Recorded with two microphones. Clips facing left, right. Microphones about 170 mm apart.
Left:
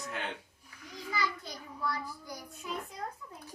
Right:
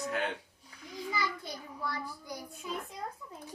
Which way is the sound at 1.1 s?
15° right (ahead or behind).